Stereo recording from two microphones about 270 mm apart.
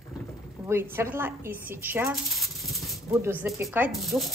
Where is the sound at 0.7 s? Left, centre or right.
Centre.